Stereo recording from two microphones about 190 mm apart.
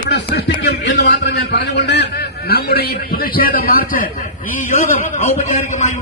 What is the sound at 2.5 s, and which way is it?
A man's voice, 55° left (ahead or behind).